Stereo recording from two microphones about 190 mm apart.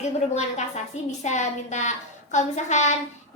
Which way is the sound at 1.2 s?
40° left (ahead or behind).